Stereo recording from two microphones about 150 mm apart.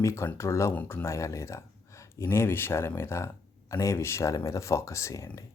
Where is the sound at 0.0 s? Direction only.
20° left (ahead or behind).